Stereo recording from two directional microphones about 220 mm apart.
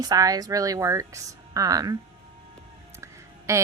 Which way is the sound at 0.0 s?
15° right (ahead or behind).